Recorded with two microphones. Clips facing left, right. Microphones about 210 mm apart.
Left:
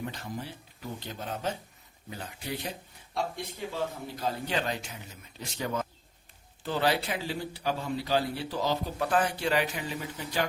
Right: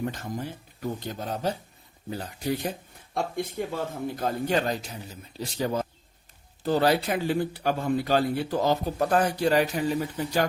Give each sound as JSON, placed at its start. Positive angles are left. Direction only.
{"t": 0.0, "sound": "a man's voice", "side_deg": -45}